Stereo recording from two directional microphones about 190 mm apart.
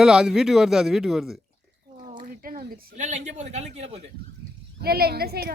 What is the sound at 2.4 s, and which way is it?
Speech, 50° right (ahead or behind).